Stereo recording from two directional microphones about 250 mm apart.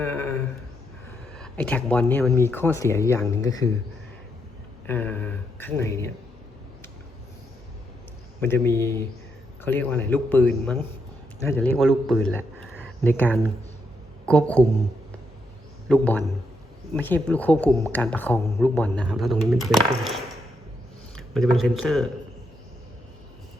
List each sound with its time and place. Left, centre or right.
0.0 s a sound: centre
1.4 s speech: centre
4.9 s speech: centre
8.4 s speech: centre
15.9 s speech: centre
21.3 s speech: centre